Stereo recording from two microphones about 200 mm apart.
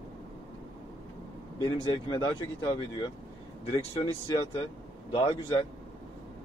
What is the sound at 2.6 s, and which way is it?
Speech, 20° left (ahead or behind).